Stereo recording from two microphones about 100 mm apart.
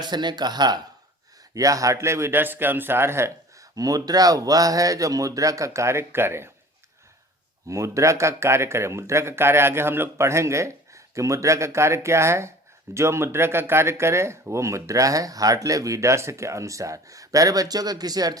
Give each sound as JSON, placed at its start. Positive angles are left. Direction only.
{"t": 0.0, "sound": "speech", "side_deg": -45}
{"t": 1.5, "sound": "speech", "side_deg": -35}
{"t": 7.7, "sound": "a man's voice", "side_deg": -30}